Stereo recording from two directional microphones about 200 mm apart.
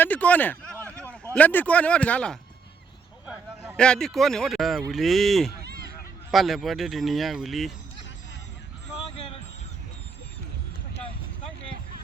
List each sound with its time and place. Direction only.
0.0 s speech: 5° left (ahead or behind)
3.8 s speech: 5° left (ahead or behind)
9.0 s a sound: 30° left (ahead or behind)